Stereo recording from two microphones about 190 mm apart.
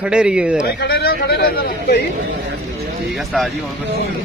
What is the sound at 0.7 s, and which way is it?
A man's voice, 55° left (ahead or behind).